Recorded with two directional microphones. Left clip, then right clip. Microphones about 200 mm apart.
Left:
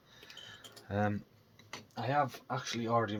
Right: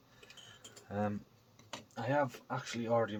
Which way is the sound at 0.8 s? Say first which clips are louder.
Left 3 dB; 40° left (ahead or behind).